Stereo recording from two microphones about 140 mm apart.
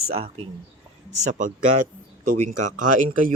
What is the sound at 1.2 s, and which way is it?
Speech, 65° right (ahead or behind).